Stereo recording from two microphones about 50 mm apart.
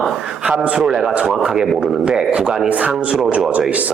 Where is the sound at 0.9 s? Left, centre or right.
Centre.